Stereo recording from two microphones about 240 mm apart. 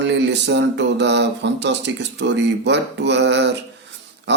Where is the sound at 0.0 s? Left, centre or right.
Right.